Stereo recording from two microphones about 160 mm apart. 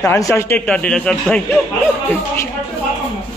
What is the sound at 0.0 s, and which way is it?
A man's voice, 20° left (ahead or behind).